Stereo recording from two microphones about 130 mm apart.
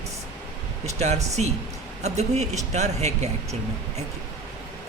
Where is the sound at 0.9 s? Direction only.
60° right (ahead or behind).